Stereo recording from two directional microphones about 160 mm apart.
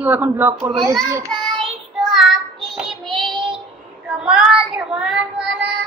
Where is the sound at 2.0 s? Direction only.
Centre (ahead or behind).